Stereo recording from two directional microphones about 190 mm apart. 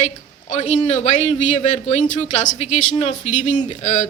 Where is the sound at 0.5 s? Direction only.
35° left (ahead or behind).